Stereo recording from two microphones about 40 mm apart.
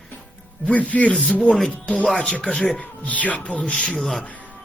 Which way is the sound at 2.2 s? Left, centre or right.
Left.